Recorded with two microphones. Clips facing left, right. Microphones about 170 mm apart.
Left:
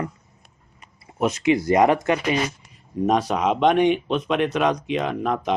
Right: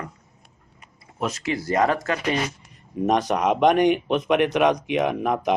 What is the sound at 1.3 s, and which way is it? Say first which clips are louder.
Speech: left 7 dB; 20° left (ahead or behind).